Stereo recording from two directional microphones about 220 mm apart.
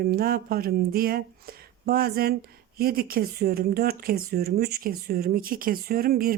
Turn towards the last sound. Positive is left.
turn(degrees=-40)  # may be behind; listen again after turning